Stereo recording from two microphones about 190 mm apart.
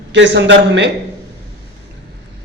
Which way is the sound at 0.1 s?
65° right (ahead or behind).